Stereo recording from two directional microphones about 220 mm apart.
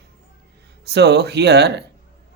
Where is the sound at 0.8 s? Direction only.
50° right (ahead or behind).